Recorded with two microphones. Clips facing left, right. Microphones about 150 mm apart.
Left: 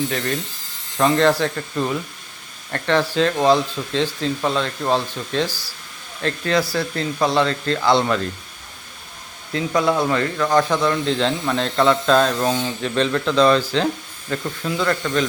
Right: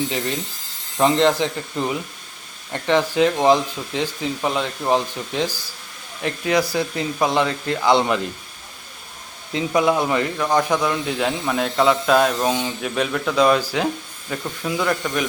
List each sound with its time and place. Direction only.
0.1 s speech: 20° right (ahead or behind)
9.5 s speech: 20° right (ahead or behind)